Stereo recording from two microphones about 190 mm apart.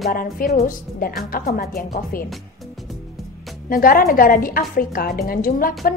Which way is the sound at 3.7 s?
50° left (ahead or behind).